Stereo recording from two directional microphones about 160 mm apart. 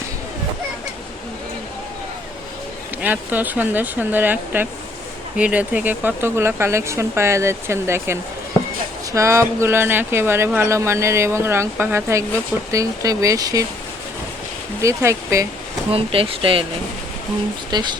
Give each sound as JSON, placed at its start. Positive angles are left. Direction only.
{"t": 3.0, "sound": "speech", "side_deg": -10}
{"t": 14.8, "sound": "speech", "side_deg": -20}
{"t": 15.9, "sound": "speech", "side_deg": -35}
{"t": 17.7, "sound": "speech", "side_deg": -25}